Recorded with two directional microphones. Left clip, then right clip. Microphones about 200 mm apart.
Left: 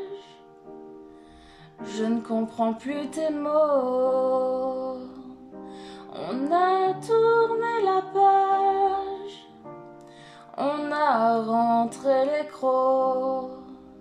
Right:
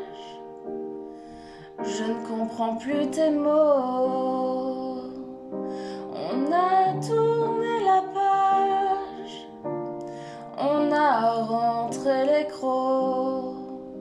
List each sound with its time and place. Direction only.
2.0 s music: 20° left (ahead or behind)
10.6 s female singing: 20° left (ahead or behind)